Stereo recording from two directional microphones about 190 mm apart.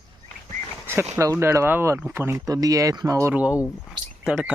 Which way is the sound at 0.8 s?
10° right (ahead or behind).